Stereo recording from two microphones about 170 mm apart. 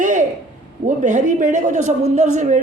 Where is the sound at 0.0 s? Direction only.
50° right (ahead or behind).